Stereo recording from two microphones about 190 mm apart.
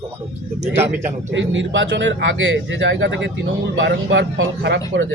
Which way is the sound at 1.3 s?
75° right (ahead or behind).